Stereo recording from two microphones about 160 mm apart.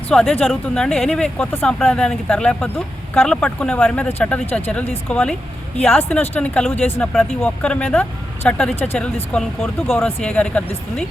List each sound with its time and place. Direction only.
0.1 s speech: 5° left (ahead or behind)
8.7 s speech: 40° left (ahead or behind)
9.3 s speech: 10° left (ahead or behind)